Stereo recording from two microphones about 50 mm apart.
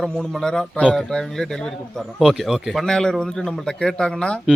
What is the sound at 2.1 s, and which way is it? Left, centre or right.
Speech, centre.